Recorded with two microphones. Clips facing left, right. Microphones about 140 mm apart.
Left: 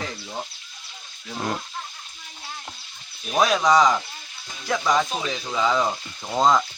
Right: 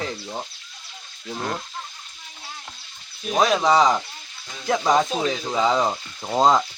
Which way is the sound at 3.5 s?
25° right (ahead or behind).